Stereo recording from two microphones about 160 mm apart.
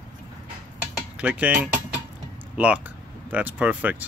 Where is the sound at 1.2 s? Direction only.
10° right (ahead or behind).